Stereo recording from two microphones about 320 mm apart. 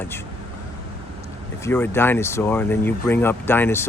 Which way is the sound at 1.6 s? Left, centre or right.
Centre.